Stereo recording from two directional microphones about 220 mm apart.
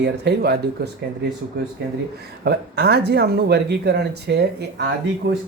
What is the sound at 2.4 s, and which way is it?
Speech, 50° right (ahead or behind).